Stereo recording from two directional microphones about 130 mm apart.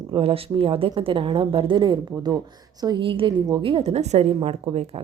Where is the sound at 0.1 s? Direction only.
45° right (ahead or behind).